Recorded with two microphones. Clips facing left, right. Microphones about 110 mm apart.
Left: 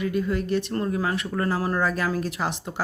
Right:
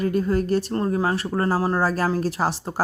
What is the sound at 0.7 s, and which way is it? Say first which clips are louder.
Speech: right 3 dB; 30° right (ahead or behind).